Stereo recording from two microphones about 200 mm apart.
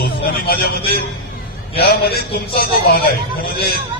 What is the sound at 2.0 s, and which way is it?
Speech, 50° left (ahead or behind).